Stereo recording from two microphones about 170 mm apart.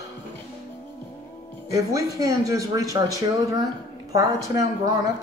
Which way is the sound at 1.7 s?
20° right (ahead or behind).